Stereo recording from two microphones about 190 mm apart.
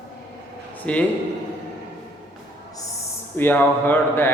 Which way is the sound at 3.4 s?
10° left (ahead or behind).